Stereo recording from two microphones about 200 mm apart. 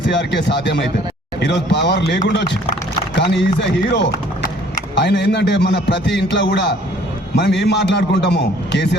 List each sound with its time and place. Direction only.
0.1 s a man's voice: 60° left (ahead or behind)